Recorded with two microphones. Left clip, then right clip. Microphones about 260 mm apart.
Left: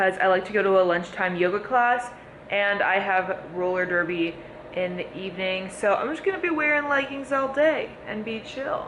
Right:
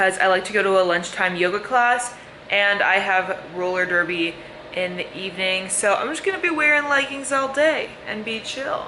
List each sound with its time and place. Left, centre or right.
0.0 s a man's voice: centre